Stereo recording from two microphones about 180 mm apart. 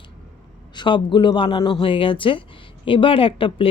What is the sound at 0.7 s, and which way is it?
A man's voice, 25° left (ahead or behind).